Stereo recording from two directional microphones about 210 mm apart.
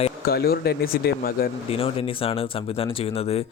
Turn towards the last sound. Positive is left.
turn(degrees=30)  # may be behind; listen again after turning